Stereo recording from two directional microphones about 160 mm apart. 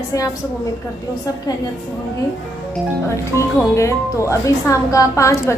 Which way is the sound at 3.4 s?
20° left (ahead or behind).